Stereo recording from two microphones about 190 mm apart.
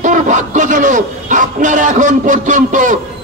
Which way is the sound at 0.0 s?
40° right (ahead or behind).